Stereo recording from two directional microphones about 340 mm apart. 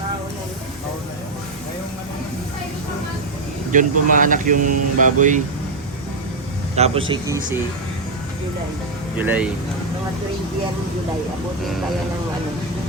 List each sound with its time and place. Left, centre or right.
3.7 s speech: right
6.7 s speech: centre
9.1 s speech: centre